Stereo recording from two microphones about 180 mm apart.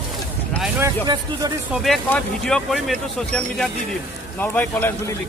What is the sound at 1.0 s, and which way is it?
Speech, 25° right (ahead or behind).